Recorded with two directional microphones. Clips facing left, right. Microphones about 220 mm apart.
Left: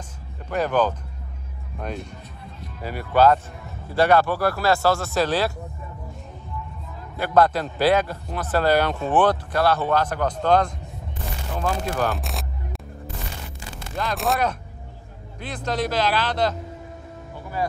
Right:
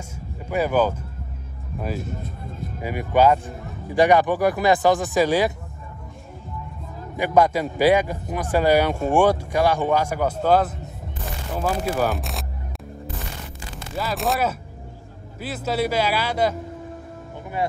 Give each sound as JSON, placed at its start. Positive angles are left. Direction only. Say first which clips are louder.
{"t": 0.5, "sound": "a man's voice", "louder": "right 1 dB", "side_deg": -10}
{"t": 2.1, "sound": "speech", "louder": "right 7 dB", "side_deg": -50}
{"t": 2.8, "sound": "a man's voice", "louder": "even", "side_deg": -15}
{"t": 7.2, "sound": "a man's voice", "louder": "right 1 dB", "side_deg": -15}
{"t": 13.9, "sound": "a man's voice", "louder": "even", "side_deg": 0}